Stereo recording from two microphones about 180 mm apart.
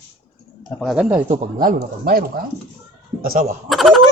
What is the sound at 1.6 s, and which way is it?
Speech, 55° right (ahead or behind).